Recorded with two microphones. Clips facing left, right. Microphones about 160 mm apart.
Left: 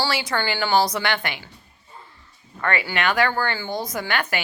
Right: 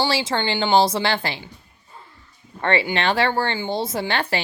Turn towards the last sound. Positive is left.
turn(degrees=-30)  # may be behind; listen again after turning